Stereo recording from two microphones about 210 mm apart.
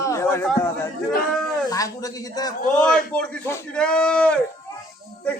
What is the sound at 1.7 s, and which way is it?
Speech, 15° left (ahead or behind).